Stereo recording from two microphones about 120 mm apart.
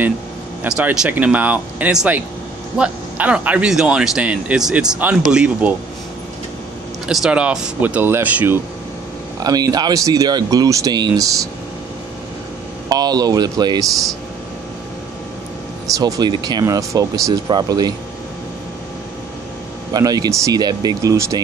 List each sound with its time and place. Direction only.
0.7 s speech: 10° right (ahead or behind)
7.1 s speech: 5° right (ahead or behind)
9.4 s speech: 30° right (ahead or behind)
12.9 s speech: 35° right (ahead or behind)
15.9 s speech: 30° right (ahead or behind)
19.9 s speech: 35° right (ahead or behind)